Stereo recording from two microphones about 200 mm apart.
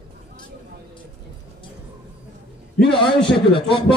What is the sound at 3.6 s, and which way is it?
Speech, 25° left (ahead or behind).